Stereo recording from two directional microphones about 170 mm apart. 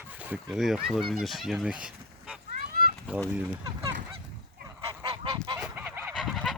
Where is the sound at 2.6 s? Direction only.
60° right (ahead or behind).